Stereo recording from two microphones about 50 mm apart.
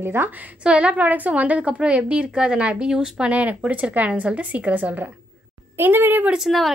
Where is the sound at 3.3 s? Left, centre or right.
Right.